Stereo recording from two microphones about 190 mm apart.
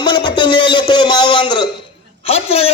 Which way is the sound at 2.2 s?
30° left (ahead or behind).